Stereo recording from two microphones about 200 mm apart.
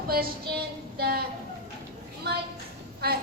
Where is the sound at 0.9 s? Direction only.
50° right (ahead or behind).